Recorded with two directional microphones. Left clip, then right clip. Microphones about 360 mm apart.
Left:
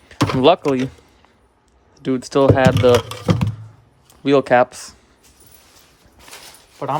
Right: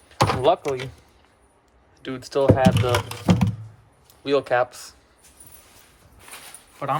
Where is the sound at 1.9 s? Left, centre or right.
Centre.